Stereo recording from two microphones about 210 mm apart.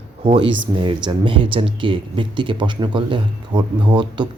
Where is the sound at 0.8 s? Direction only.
20° right (ahead or behind).